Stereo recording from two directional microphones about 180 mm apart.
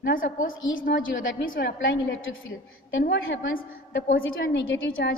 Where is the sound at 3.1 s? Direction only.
70° left (ahead or behind).